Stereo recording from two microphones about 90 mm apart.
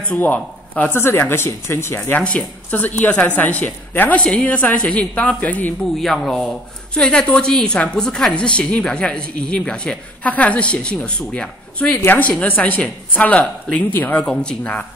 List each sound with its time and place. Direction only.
0.1 s a man's voice: 20° left (ahead or behind)
5.9 s speech: centre (ahead or behind)
11.9 s speech: 25° left (ahead or behind)